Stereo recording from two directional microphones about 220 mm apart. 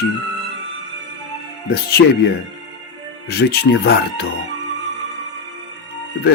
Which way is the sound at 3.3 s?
50° left (ahead or behind).